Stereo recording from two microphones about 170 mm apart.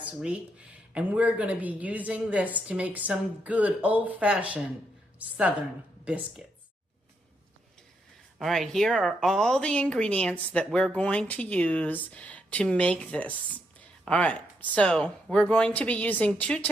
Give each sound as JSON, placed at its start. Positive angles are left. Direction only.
{"t": 0.0, "sound": "a woman's voice", "side_deg": -5}
{"t": 8.4, "sound": "a woman's voice", "side_deg": 0}